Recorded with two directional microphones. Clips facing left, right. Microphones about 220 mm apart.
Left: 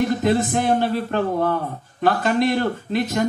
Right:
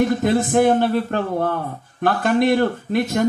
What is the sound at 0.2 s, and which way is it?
Speech, 50° right (ahead or behind).